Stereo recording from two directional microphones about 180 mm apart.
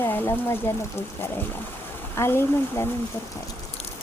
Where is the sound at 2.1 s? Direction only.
15° left (ahead or behind).